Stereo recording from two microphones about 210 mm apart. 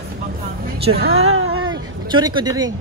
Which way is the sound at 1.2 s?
85° right.